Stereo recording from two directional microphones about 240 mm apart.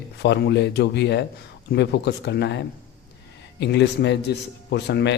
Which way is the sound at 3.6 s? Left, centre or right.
Left.